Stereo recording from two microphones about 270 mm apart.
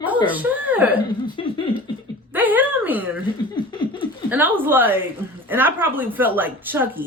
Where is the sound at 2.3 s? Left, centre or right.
Centre.